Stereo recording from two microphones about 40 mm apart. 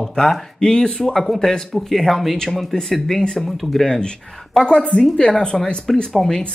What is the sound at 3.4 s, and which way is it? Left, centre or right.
Speech, centre.